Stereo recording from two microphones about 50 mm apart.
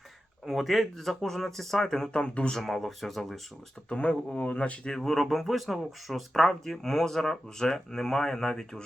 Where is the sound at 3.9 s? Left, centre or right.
Left.